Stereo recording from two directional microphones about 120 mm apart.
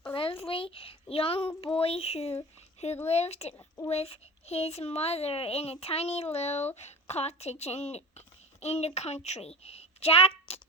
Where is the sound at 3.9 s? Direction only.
60° left (ahead or behind).